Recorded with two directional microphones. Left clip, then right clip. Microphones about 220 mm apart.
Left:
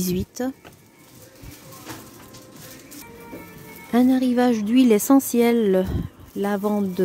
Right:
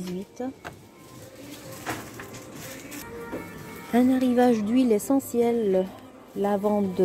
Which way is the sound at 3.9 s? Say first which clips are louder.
Left 3 dB; 25° left (ahead or behind).